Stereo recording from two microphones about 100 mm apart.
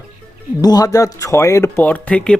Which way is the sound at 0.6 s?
40° left (ahead or behind).